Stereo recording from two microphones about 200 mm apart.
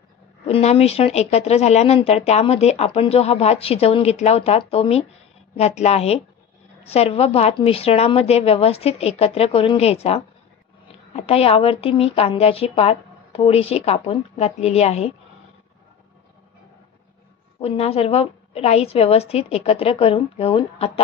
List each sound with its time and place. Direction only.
0.5 s a woman's voice: 30° left (ahead or behind)
17.6 s a woman's voice: 30° left (ahead or behind)